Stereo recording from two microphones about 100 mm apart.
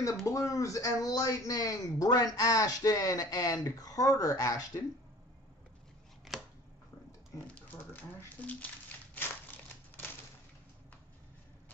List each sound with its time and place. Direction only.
0.0 s speech: 35° left (ahead or behind)
6.3 s chopping: centre (ahead or behind)
7.4 s crumpling: 15° left (ahead or behind)